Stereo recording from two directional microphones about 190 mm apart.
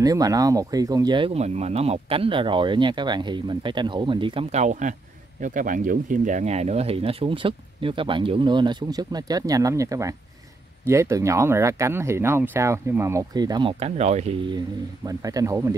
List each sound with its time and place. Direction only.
0.0 s speech: 20° right (ahead or behind); by 14.3 s 35° right (ahead or behind)
15.0 s speech: 20° right (ahead or behind)